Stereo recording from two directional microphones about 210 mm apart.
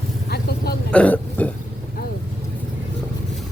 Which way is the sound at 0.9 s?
5° left (ahead or behind).